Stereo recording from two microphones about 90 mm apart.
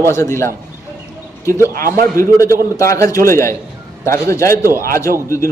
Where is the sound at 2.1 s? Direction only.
35° left (ahead or behind).